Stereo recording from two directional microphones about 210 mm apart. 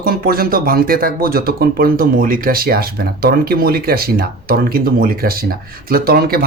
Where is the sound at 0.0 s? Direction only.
45° right (ahead or behind).